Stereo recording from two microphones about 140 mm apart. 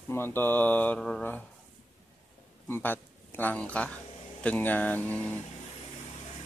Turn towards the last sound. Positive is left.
turn(degrees=10)  # may be behind; listen again after turning